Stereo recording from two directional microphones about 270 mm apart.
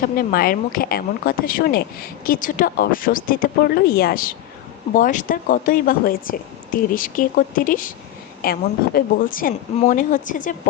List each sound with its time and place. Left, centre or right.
0.2 s a woman's voice: left